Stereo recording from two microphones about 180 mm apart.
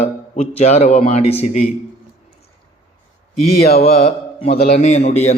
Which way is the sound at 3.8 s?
35° left (ahead or behind).